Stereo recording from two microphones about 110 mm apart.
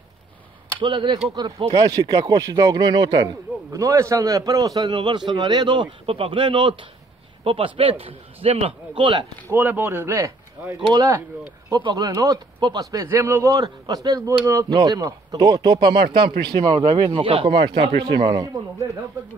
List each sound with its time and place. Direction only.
0.7 s a man's voice: 50° right (ahead or behind)
3.7 s a man's voice: 30° right (ahead or behind); by 9.2 s 50° right (ahead or behind)
9.5 s a man's voice: 20° right (ahead or behind); by 18.9 s 35° right (ahead or behind)